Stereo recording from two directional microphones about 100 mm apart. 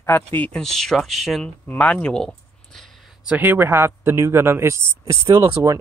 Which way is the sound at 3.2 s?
15° right (ahead or behind).